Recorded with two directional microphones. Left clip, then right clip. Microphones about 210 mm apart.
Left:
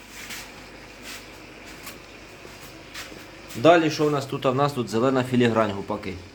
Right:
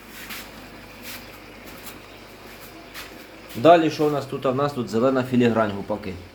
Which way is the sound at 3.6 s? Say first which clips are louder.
Right 2 dB; 10° left (ahead or behind).